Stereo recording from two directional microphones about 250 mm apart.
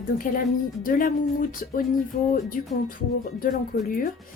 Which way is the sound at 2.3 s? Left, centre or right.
Left.